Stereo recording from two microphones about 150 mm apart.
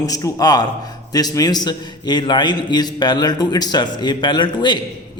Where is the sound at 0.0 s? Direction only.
25° left (ahead or behind).